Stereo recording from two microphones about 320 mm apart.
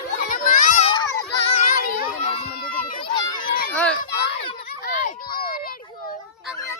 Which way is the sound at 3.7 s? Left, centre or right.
Centre.